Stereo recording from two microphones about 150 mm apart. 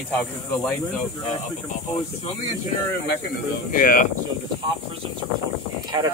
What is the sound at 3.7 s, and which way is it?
Speech, 65° left (ahead or behind).